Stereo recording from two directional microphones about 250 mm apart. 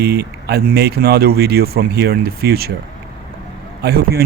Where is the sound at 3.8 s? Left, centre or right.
Right.